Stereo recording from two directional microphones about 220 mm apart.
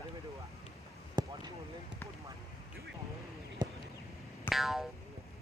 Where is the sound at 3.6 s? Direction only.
20° right (ahead or behind).